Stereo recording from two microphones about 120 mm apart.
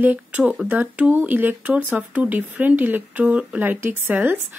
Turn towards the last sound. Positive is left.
turn(degrees=-15)  # may be behind; listen again after turning